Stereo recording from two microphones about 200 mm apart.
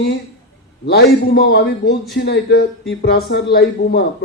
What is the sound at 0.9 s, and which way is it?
A man's voice, 55° left (ahead or behind).